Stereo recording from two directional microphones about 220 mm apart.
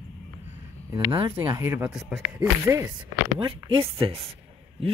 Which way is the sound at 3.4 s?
20° right (ahead or behind).